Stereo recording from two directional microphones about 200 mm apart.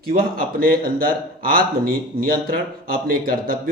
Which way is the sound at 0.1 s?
45° right (ahead or behind).